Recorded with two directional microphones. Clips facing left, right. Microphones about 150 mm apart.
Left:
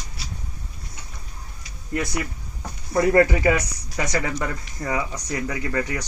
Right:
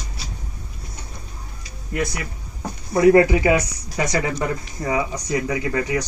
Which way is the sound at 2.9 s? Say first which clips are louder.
Right 4 dB; 10° right (ahead or behind).